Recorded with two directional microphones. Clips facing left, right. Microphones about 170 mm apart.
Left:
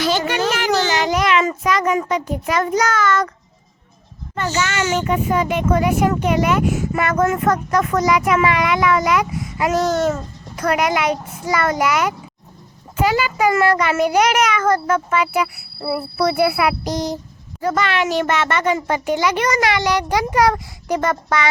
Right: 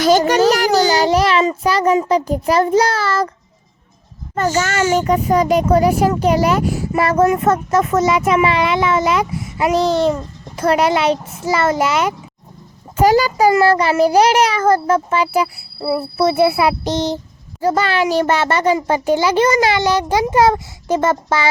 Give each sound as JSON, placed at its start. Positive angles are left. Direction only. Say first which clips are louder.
{"t": 0.0, "sound": "a child's voice", "louder": "right 7 dB", "side_deg": -40}
{"t": 4.4, "sound": "a child's voice", "louder": "right 4 dB", "side_deg": -40}
{"t": 13.0, "sound": "a child's voice", "louder": "right 5 dB", "side_deg": -40}